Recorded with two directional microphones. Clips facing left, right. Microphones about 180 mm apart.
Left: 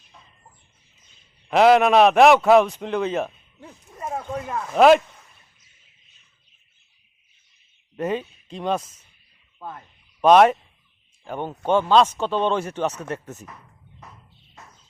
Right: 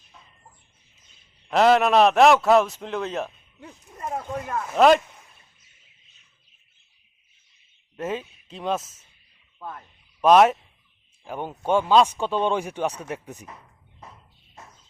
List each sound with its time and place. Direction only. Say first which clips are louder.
1.5 s a man's voice: left 3 dB; 5° left (ahead or behind)
7.9 s a man's voice: left 4 dB; centre (ahead or behind)
10.2 s speech: left 2 dB; 5° right (ahead or behind)